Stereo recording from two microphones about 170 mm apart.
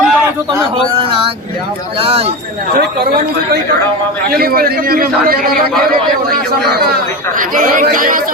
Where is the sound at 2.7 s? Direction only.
65° right (ahead or behind).